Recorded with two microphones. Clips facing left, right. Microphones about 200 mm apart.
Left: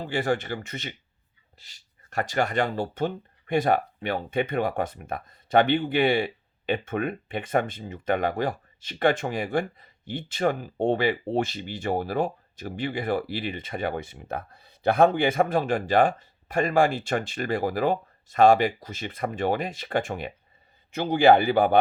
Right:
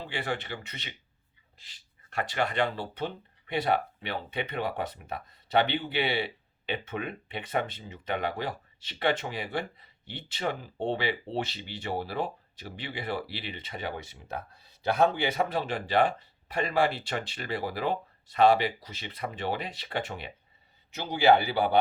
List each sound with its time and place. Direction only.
0.0 s speech: 45° left (ahead or behind)